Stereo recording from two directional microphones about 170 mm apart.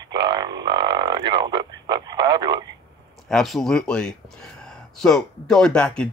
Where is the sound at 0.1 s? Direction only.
25° right (ahead or behind).